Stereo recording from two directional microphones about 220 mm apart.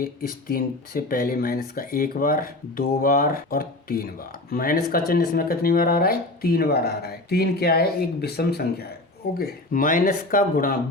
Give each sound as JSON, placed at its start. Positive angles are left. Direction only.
{"t": 0.0, "sound": "speech", "side_deg": 40}